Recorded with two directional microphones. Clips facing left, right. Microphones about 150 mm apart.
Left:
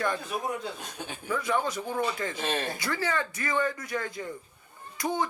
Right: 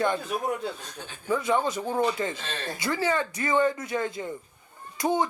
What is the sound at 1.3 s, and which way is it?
Speech, 25° right (ahead or behind).